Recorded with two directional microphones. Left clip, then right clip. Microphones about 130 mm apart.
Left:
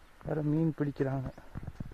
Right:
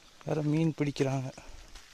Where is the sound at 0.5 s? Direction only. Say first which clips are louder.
Right 2 dB; 30° right (ahead or behind).